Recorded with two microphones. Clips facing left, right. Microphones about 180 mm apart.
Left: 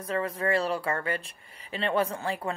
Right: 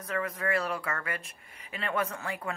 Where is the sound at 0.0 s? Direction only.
30° left (ahead or behind).